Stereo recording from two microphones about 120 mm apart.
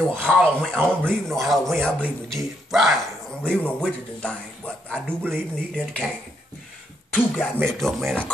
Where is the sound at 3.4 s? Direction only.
10° left (ahead or behind).